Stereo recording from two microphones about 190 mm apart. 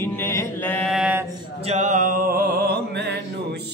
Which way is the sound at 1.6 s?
35° right (ahead or behind).